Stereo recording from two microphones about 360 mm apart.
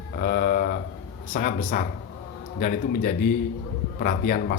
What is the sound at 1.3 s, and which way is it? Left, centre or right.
Speech, left.